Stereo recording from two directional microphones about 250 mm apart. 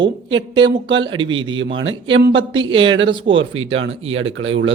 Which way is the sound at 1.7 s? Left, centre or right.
Right.